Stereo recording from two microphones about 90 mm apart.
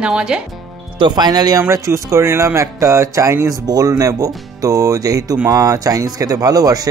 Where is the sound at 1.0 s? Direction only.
55° right (ahead or behind).